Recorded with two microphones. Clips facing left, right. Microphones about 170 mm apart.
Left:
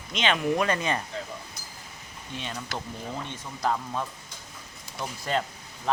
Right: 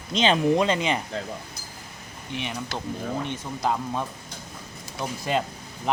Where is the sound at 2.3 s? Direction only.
15° right (ahead or behind).